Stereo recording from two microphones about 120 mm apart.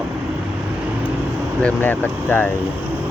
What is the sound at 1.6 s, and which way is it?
Speech, 15° left (ahead or behind).